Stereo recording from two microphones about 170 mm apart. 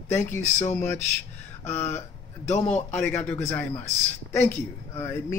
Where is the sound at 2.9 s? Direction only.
10° left (ahead or behind).